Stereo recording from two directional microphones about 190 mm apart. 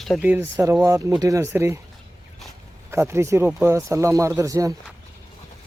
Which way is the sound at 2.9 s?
15° right (ahead or behind).